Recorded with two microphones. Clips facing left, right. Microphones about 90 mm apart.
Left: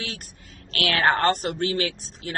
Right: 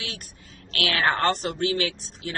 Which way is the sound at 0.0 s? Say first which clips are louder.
Left 2 dB; 40° left (ahead or behind).